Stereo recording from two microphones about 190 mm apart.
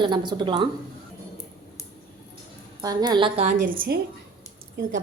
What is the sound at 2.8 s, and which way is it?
Speech, 20° right (ahead or behind).